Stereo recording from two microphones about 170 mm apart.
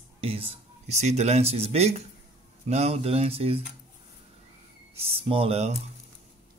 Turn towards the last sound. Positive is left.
turn(degrees=-35)  # may be behind; listen again after turning